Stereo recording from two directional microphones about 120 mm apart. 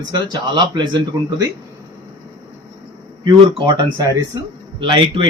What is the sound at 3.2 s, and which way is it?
Speech, 40° right (ahead or behind).